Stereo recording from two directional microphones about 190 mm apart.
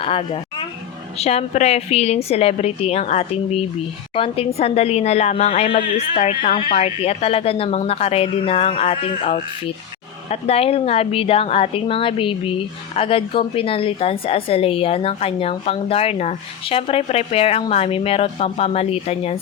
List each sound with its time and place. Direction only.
0.0 s a woman's voice: 30° left (ahead or behind)